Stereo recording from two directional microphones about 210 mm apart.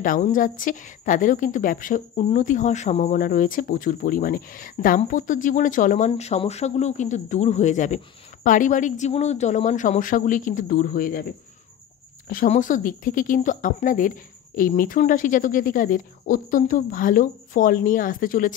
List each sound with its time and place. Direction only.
0.0 s a woman's voice: 40° left (ahead or behind)
12.3 s a woman's voice: 40° left (ahead or behind)